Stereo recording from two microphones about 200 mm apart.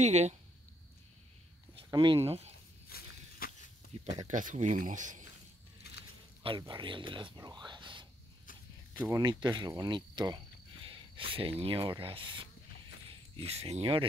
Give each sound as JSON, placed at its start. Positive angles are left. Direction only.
{"t": 0.0, "sound": "speech", "side_deg": -35}
{"t": 1.9, "sound": "speech", "side_deg": -20}
{"t": 2.9, "sound": "a sound", "side_deg": 50}
{"t": 3.9, "sound": "a sound", "side_deg": -30}
{"t": 4.3, "sound": "speech", "side_deg": -40}
{"t": 6.4, "sound": "speech", "side_deg": -25}
{"t": 9.1, "sound": "speech", "side_deg": -20}